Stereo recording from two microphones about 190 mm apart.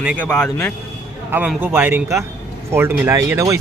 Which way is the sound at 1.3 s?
10° right (ahead or behind).